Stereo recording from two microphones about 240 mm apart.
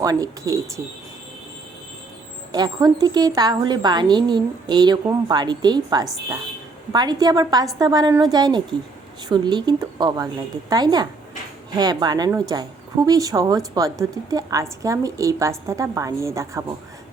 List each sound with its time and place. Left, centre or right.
0.0 s speech: centre
2.5 s speech: centre